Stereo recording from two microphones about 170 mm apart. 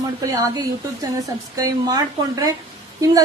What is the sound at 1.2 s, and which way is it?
A woman's voice, 20° right (ahead or behind).